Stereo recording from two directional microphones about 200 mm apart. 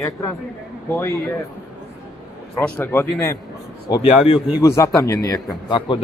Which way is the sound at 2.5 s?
10° left (ahead or behind).